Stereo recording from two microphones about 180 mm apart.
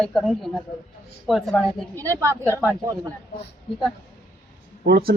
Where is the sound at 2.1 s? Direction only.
15° right (ahead or behind).